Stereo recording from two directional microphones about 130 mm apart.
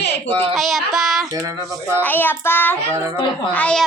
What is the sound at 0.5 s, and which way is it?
Speech, centre (ahead or behind).